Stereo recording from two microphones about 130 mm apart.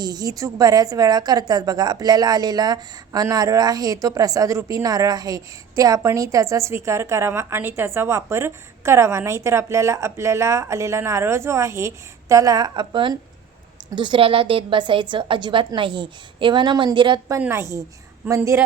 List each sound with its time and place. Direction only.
0.0 s a woman's voice: 30° right (ahead or behind)
17.5 s a woman's voice: 20° right (ahead or behind)